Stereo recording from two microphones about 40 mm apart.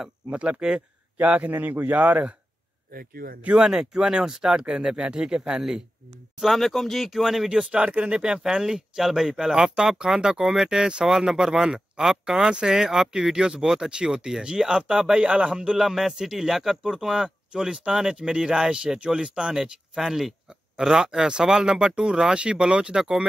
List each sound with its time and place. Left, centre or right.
0.3 s speech: right
3.5 s speech: centre
6.4 s speech: centre
7.4 s speech: right
15.8 s speech: centre
19.6 s speech: centre